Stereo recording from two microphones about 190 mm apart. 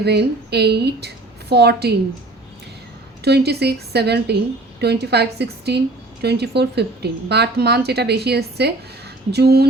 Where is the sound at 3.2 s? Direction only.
60° right (ahead or behind).